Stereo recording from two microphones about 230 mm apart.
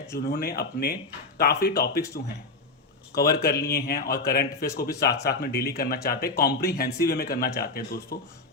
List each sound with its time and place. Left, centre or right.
0.1 s speech: left
3.2 s speech: left